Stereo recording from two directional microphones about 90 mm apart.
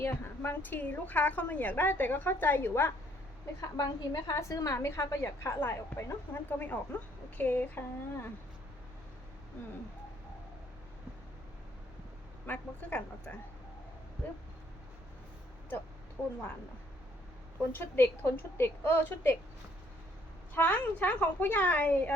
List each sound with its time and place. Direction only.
0.0 s a woman's voice: 25° left (ahead or behind)
3.8 s a woman's voice: 40° left (ahead or behind)
7.3 s a woman's voice: 20° left (ahead or behind)
12.5 s a woman's voice: 15° left (ahead or behind)
17.7 s a woman's voice: 25° left (ahead or behind)
20.6 s a woman's voice: 15° left (ahead or behind)